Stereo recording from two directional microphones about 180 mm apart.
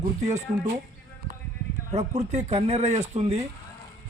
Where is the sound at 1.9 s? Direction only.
40° right (ahead or behind).